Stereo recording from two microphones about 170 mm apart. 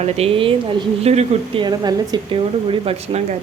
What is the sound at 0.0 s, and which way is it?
Speech, 35° right (ahead or behind).